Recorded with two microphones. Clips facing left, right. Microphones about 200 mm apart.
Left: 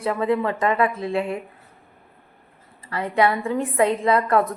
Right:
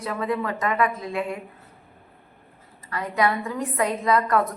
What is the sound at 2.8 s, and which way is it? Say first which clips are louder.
A woman's voice: left 3 dB; 30° left (ahead or behind).